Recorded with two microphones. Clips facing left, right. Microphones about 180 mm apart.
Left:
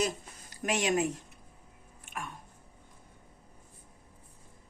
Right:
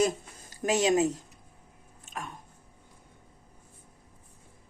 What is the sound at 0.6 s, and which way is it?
Speech, 20° right (ahead or behind).